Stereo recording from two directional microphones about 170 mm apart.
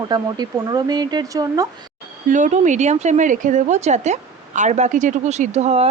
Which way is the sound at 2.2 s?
45° right (ahead or behind).